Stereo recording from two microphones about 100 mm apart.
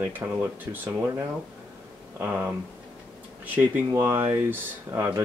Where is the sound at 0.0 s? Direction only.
25° right (ahead or behind).